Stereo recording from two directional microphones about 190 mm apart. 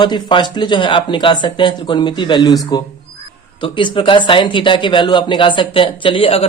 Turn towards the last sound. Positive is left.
turn(degrees=30)  # may be behind; listen again after turning